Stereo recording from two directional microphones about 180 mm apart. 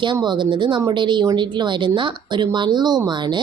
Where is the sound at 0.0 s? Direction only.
25° right (ahead or behind).